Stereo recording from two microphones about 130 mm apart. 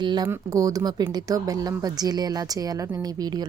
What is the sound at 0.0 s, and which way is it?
A woman's voice, 35° right (ahead or behind).